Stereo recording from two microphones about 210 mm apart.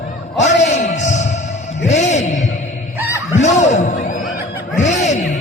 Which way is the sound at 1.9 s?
35° left (ahead or behind).